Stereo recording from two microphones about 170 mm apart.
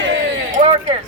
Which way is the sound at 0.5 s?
35° right (ahead or behind).